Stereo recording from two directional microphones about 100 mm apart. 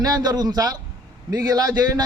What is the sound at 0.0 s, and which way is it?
A man's voice, 40° right (ahead or behind).